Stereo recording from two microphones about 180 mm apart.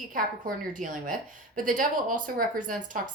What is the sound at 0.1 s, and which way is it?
Speech, 50° right (ahead or behind).